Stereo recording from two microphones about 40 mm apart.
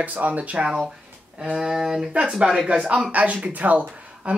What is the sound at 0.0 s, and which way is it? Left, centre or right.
Speech, right.